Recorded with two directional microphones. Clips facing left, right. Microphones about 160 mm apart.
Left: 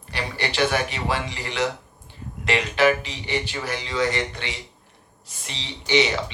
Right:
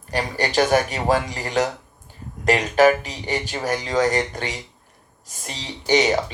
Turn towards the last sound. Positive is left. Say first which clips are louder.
# right 3 dB
turn(degrees=-45)  # may be behind; listen again after turning